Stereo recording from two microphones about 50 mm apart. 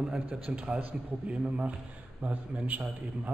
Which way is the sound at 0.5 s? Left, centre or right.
Right.